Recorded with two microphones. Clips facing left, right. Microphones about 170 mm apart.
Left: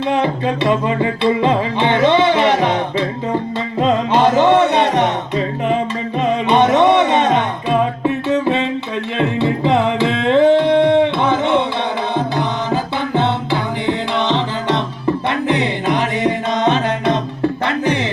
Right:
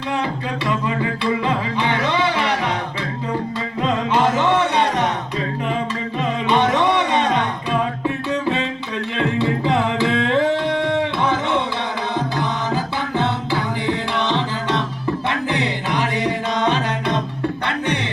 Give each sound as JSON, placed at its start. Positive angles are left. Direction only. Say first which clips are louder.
{"t": 0.1, "sound": "music", "louder": "left 5 dB", "side_deg": 25}
{"t": 3.8, "sound": "music", "louder": "left 5 dB", "side_deg": 30}
{"t": 6.5, "sound": "music", "louder": "left 5 dB", "side_deg": 20}
{"t": 9.1, "sound": "music", "louder": "left 3 dB", "side_deg": 20}
{"t": 10.9, "sound": "a sound", "louder": "left 6 dB", "side_deg": 20}
{"t": 12.4, "sound": "music", "louder": "left 3 dB", "side_deg": 20}